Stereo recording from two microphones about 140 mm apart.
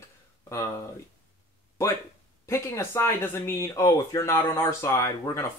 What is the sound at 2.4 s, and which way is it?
Speech, 20° left (ahead or behind).